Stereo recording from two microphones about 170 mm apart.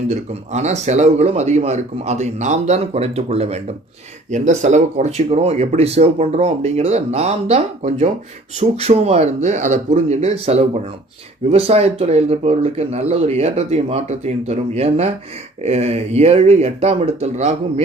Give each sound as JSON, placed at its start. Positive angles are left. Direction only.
{"t": 0.1, "sound": "speech", "side_deg": -40}